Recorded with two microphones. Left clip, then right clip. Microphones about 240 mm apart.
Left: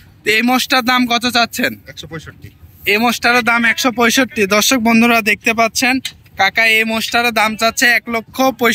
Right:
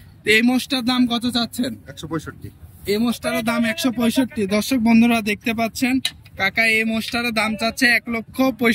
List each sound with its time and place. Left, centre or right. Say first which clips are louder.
0.2 s speech: left 3 dB; centre
2.0 s a man's voice: right 1 dB; right
3.3 s speech: left 9 dB; centre